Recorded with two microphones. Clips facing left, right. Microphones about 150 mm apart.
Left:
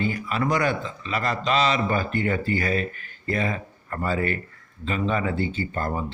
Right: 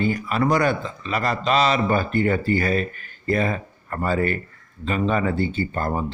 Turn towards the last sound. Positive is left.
turn(degrees=-40)  # may be behind; listen again after turning